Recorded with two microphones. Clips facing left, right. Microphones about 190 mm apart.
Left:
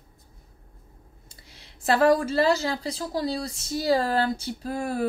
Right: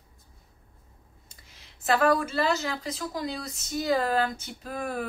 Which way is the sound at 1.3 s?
35° left (ahead or behind).